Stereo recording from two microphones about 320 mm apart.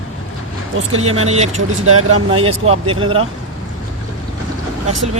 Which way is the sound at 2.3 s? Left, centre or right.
Centre.